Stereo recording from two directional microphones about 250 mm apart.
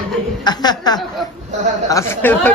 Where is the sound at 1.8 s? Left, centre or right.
Centre.